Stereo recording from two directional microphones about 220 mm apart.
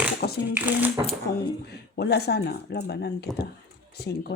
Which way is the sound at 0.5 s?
10° right (ahead or behind).